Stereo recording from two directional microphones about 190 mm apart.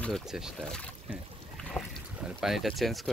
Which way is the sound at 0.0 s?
Centre (ahead or behind).